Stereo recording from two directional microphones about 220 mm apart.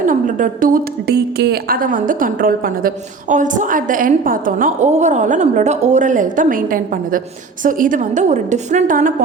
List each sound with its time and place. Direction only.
0.0 s a woman's voice: 35° right (ahead or behind)